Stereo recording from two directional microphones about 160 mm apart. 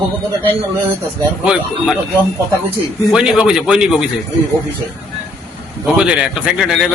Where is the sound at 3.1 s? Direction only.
5° right (ahead or behind).